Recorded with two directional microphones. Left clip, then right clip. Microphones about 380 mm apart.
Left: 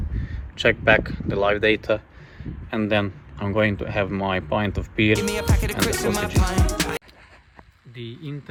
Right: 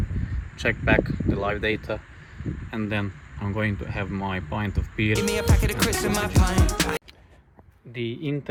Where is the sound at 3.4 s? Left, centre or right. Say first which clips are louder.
Left 7 dB; left.